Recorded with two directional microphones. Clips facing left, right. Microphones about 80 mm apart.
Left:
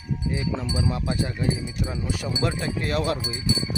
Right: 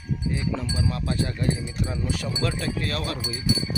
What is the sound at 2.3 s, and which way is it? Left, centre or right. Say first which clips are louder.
Speech: left 3 dB; centre.